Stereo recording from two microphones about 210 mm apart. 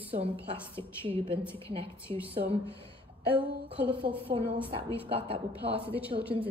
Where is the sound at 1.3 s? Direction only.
25° right (ahead or behind).